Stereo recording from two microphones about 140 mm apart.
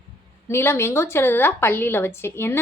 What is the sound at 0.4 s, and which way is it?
A woman's voice, 20° left (ahead or behind).